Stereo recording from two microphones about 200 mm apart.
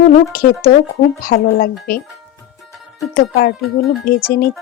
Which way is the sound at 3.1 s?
50° left (ahead or behind).